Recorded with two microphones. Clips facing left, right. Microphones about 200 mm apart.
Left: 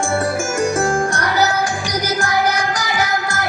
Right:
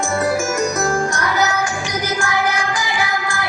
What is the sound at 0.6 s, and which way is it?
Music, 30° left (ahead or behind).